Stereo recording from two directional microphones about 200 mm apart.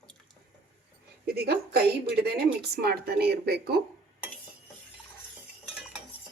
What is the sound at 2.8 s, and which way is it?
Speech, 50° right (ahead or behind).